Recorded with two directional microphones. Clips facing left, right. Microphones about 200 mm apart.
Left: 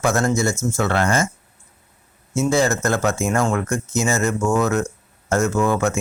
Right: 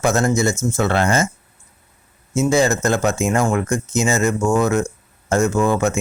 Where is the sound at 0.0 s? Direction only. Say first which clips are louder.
Right 2 dB; 20° right (ahead or behind).